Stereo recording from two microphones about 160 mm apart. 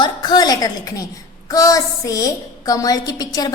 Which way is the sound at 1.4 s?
20° left (ahead or behind).